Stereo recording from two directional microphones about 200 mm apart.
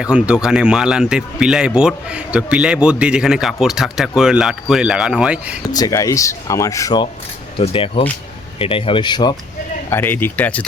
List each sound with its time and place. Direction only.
0.0 s speech: 5° right (ahead or behind)
5.6 s speech: 20° left (ahead or behind)
9.9 s speech: 10° left (ahead or behind)